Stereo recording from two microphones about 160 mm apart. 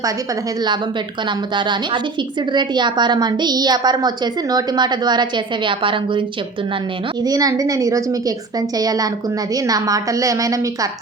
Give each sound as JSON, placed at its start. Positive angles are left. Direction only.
{"t": 1.5, "sound": "a woman's voice", "side_deg": -30}